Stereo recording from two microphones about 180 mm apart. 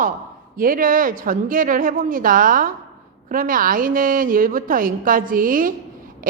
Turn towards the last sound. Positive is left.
turn(degrees=-50)  # may be behind; listen again after turning